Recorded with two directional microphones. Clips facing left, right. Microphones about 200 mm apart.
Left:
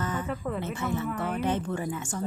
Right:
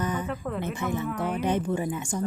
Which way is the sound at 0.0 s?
15° right (ahead or behind).